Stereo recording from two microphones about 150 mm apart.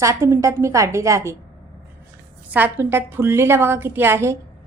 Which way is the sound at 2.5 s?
15° right (ahead or behind).